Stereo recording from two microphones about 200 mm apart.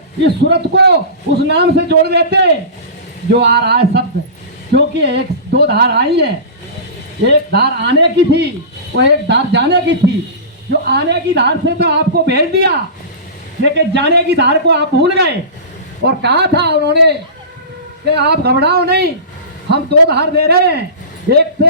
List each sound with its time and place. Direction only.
0.2 s a woman's voice: 60° right (ahead or behind)
13.7 s a woman's voice: 60° right (ahead or behind)
18.1 s a woman's voice: 55° right (ahead or behind)